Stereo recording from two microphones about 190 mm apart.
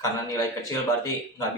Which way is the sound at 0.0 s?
20° left (ahead or behind).